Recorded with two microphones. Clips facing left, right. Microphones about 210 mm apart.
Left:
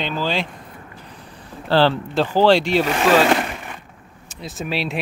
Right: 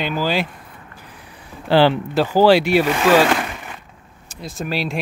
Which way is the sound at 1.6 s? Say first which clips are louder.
Right 2 dB; 15° right (ahead or behind).